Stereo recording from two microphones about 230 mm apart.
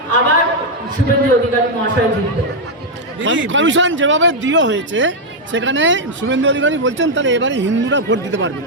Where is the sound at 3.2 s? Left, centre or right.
Right.